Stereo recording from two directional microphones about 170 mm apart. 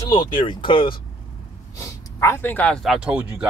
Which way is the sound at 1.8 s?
15° left (ahead or behind).